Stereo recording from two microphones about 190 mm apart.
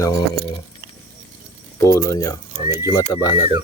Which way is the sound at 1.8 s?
15° left (ahead or behind).